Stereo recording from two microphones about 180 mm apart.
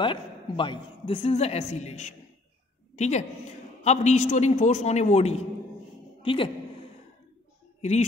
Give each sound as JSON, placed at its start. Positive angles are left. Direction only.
{"t": 0.0, "sound": "a woman's voice", "side_deg": 25}